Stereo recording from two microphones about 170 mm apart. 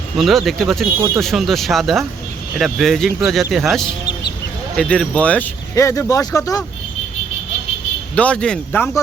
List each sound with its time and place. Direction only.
0.2 s speech: centre (ahead or behind)
5.7 s speech: 20° left (ahead or behind)
8.1 s speech: 5° left (ahead or behind)